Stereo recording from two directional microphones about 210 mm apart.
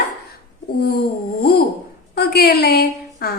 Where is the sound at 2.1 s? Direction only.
50° left (ahead or behind).